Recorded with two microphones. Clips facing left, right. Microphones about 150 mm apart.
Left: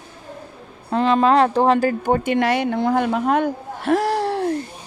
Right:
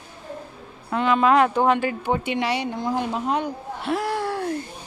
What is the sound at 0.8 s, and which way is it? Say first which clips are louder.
Speech: left 3 dB; 35° left (ahead or behind).